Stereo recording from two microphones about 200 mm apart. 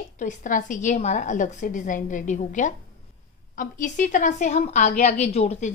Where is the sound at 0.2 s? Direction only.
40° left (ahead or behind).